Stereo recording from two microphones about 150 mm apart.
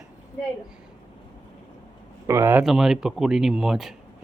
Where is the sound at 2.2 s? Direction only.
15° right (ahead or behind).